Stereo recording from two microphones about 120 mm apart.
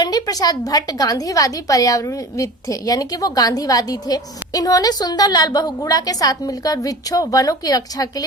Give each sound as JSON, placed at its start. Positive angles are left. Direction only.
{"t": 0.0, "sound": "a woman's voice", "side_deg": 35}